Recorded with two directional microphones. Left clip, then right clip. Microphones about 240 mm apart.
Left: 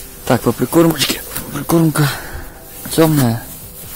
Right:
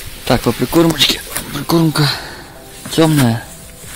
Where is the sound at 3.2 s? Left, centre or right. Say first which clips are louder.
Right 2 dB; centre.